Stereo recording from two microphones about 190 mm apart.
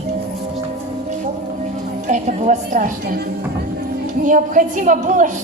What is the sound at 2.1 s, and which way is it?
A woman's voice, 35° right (ahead or behind).